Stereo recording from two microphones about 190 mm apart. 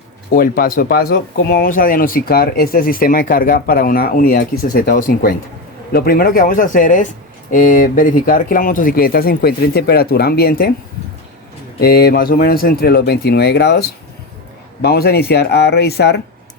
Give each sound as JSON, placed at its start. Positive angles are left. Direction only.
{"t": 0.3, "sound": "speech", "side_deg": 50}
{"t": 11.8, "sound": "speech", "side_deg": 55}